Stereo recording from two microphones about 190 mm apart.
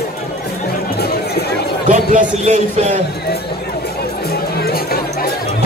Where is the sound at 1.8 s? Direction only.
40° right (ahead or behind).